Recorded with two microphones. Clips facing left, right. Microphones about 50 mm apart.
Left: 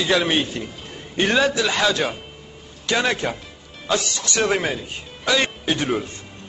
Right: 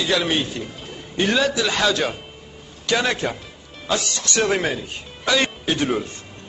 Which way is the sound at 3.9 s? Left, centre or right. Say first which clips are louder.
Even; centre.